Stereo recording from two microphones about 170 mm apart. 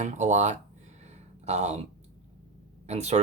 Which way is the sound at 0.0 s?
45° right (ahead or behind).